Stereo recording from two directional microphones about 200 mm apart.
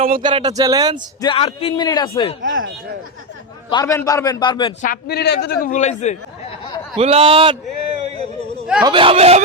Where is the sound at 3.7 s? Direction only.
15° left (ahead or behind).